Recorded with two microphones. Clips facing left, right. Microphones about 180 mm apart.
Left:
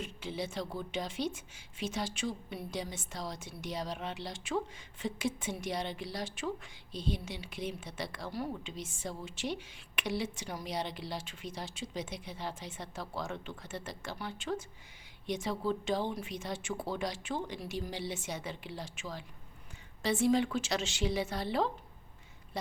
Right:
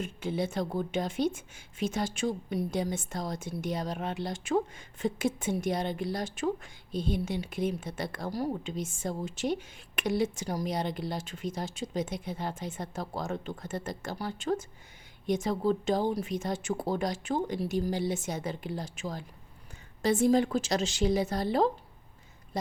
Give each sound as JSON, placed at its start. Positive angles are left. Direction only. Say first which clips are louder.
{"t": 0.0, "sound": "a woman's voice", "louder": "right 6 dB", "side_deg": -50}